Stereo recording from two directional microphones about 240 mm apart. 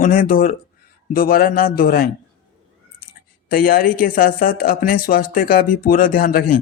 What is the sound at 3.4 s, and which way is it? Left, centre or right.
Speech, left.